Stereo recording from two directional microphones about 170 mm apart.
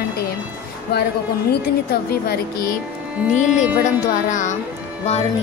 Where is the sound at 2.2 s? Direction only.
65° left (ahead or behind).